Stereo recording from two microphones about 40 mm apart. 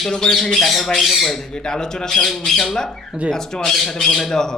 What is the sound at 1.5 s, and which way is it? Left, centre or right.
Speech, centre.